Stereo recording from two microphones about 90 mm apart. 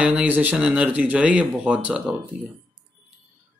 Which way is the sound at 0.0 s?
15° right (ahead or behind).